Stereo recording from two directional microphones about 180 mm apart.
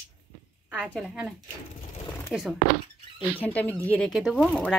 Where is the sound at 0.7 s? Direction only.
5° right (ahead or behind).